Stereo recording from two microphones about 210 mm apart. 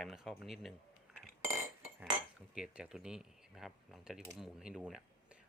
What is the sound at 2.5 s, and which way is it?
Speech, 5° right (ahead or behind).